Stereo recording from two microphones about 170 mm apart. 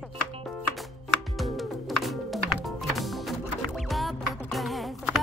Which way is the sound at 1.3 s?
Centre (ahead or behind).